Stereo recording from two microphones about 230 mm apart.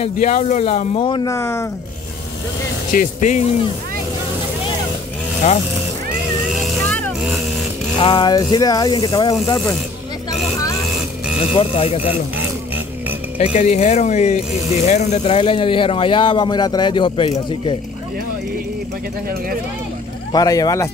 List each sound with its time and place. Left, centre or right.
0.0 s speech: left; by 1.7 s centre
2.9 s speech: left
6.5 s vehicle: centre
8.0 s speech: left
11.5 s speech: left
13.4 s speech: left
20.3 s speech: centre